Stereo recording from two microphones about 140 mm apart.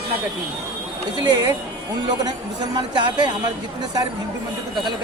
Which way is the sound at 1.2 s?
30° right (ahead or behind).